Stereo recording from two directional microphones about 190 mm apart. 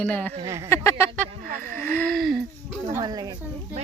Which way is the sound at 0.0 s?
10° left (ahead or behind).